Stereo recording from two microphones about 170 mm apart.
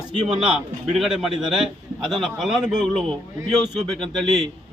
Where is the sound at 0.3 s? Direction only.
5° right (ahead or behind).